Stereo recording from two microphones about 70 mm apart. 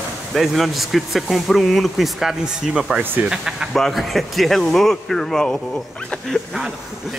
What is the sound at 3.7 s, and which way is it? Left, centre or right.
Speech, centre.